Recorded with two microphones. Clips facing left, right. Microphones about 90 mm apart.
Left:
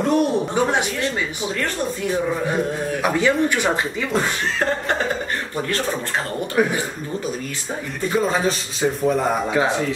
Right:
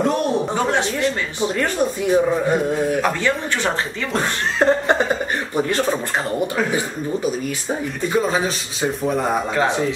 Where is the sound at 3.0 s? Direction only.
15° left (ahead or behind).